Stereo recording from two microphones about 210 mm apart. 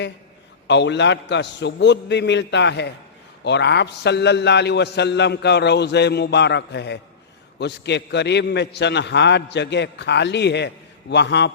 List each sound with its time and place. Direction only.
0.7 s a man's voice: 55° left (ahead or behind)